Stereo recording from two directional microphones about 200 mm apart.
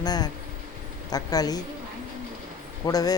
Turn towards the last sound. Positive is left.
turn(degrees=20)  # may be behind; listen again after turning